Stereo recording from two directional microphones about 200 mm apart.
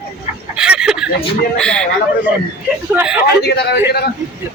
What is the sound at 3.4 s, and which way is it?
Speech, 55° left (ahead or behind).